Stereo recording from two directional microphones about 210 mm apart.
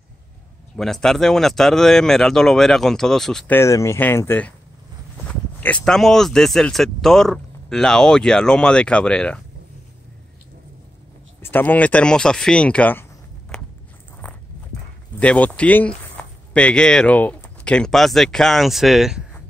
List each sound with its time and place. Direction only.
0.7 s speech: centre (ahead or behind)
11.4 s speech: 10° left (ahead or behind)
15.1 s speech: 5° left (ahead or behind)